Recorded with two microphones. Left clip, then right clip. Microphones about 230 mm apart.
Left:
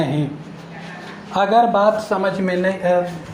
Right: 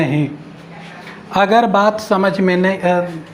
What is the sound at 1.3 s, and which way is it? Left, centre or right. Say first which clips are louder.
Speech: right 2 dB; right.